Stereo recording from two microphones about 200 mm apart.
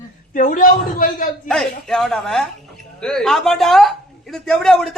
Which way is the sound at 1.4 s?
5° left (ahead or behind).